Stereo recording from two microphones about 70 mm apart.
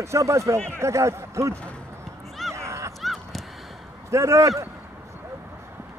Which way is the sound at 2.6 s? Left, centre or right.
Right.